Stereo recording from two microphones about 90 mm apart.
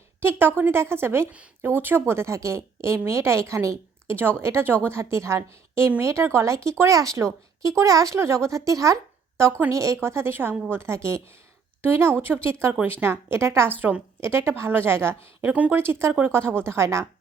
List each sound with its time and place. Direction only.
0.2 s a woman's voice: 25° right (ahead or behind)
13.9 s a woman's voice: 15° right (ahead or behind)
14.2 s a woman's voice: 30° right (ahead or behind)